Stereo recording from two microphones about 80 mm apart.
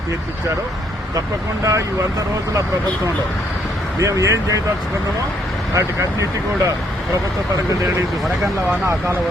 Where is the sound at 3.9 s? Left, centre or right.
Right.